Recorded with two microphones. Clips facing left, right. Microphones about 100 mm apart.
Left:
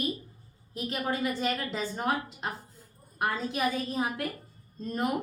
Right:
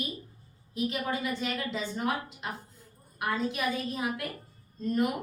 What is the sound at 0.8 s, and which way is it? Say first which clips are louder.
A woman's voice: left 1 dB; 40° left (ahead or behind).